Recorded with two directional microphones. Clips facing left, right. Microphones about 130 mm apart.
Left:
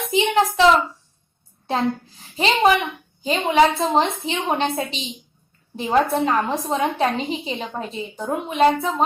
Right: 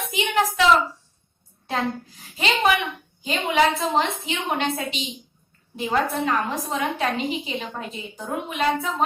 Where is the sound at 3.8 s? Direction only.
30° left (ahead or behind).